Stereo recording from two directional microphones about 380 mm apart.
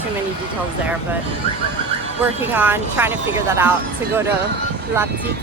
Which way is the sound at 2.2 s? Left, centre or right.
Centre.